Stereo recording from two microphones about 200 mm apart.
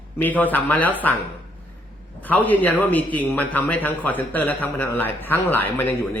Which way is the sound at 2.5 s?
10° left (ahead or behind).